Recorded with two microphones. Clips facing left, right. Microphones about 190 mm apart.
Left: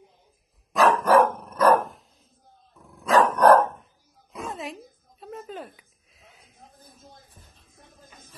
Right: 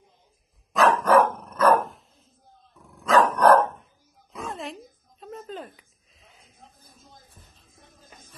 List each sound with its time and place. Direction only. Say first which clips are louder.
0.7 s dog: even; 15° left (ahead or behind)
1.8 s dog: right 1 dB; centre (ahead or behind)
3.2 s dog: left 1 dB; 15° left (ahead or behind)
4.3 s a sound: even; centre (ahead or behind)